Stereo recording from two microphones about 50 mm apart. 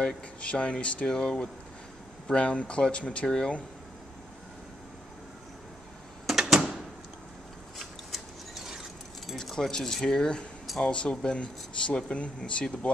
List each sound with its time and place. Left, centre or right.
0.0 s speech: left
6.2 s a sound: centre
7.8 s scissors: centre
9.3 s keys jangling: centre
9.9 s speech: centre